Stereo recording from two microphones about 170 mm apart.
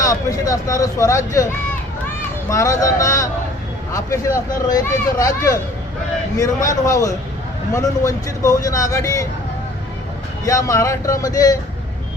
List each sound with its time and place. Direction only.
0.0 s speech: 20° left (ahead or behind)
2.5 s speech: 20° left (ahead or behind)
10.4 s speech: 20° left (ahead or behind)